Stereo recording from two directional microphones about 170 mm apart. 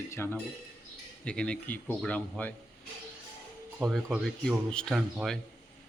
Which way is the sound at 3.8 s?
5° right (ahead or behind).